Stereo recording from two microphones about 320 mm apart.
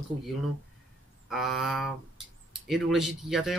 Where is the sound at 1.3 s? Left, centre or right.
Centre.